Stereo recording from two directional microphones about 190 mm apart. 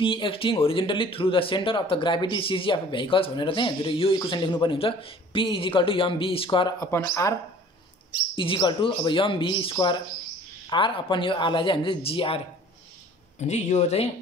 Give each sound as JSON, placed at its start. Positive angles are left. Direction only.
{"t": 0.0, "sound": "speech", "side_deg": 25}
{"t": 6.9, "sound": "speech", "side_deg": 15}
{"t": 8.4, "sound": "speech", "side_deg": 25}
{"t": 13.5, "sound": "speech", "side_deg": 35}